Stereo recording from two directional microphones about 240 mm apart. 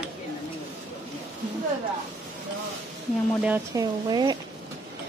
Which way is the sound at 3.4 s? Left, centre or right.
Centre.